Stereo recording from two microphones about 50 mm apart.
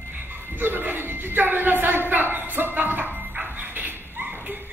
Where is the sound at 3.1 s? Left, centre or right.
Right.